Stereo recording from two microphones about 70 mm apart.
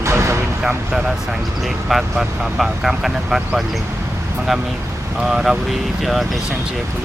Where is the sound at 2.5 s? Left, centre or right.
Centre.